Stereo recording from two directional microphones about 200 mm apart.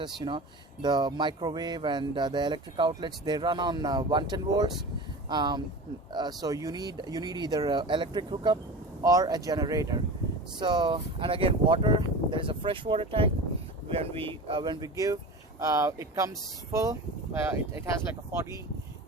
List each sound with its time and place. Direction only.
0.0 s speech: 25° right (ahead or behind)